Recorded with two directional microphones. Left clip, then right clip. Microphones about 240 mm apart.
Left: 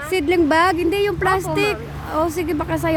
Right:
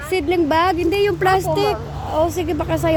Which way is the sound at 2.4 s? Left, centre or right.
Centre.